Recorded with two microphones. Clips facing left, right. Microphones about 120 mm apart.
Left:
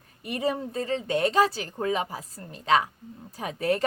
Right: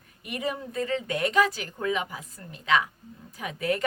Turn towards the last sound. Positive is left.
turn(degrees=35)  # may be behind; listen again after turning